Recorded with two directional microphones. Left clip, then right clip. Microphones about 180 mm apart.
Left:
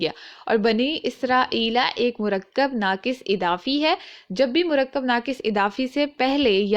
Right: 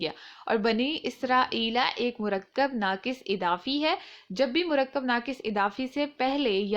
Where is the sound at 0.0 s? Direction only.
25° left (ahead or behind).